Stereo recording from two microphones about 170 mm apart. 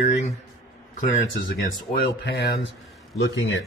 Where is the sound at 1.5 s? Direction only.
70° left (ahead or behind).